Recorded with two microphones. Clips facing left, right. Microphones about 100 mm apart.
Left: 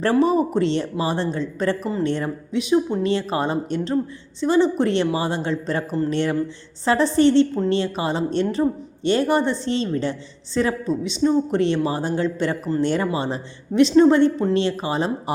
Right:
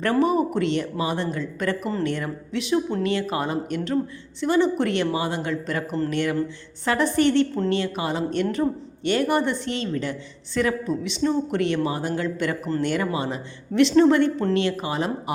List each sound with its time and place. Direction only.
0.3 s a woman's voice: 25° left (ahead or behind)